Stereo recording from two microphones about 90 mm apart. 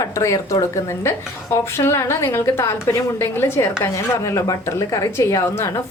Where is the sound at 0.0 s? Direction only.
35° left (ahead or behind).